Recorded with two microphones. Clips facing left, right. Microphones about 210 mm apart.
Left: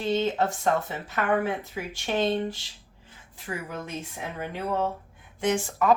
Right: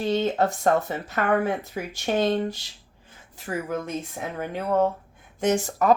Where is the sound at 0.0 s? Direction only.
40° right (ahead or behind).